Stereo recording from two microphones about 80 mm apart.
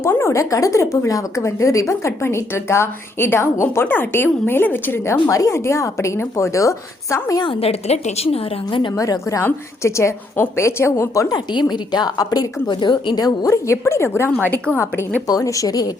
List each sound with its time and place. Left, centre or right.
0.0 s a woman's voice: left
5.3 s a woman's voice: left
9.0 s a woman's voice: left
11.3 s a woman's voice: left
12.6 s a woman's voice: left
13.2 s a woman's voice: left
14.3 s a woman's voice: centre
15.4 s speech: left